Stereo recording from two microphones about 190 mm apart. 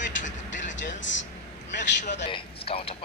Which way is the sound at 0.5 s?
40° left (ahead or behind).